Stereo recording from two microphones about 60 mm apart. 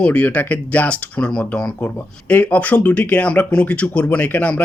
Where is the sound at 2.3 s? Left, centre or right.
Left.